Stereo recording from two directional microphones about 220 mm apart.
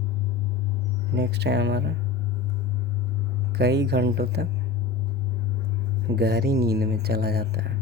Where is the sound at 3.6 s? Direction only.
50° right (ahead or behind).